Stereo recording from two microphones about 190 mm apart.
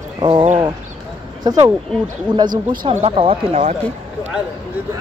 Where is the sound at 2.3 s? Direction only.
20° right (ahead or behind).